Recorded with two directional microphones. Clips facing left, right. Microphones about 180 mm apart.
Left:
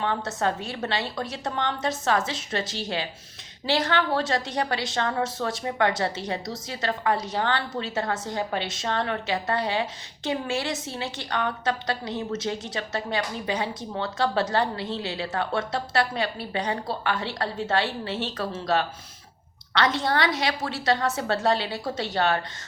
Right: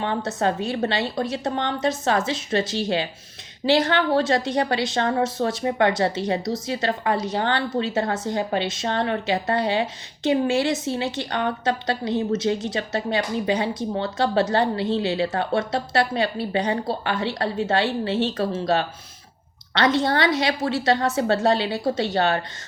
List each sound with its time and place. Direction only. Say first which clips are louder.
0.0 s a woman's voice: right 3 dB; 25° right (ahead or behind)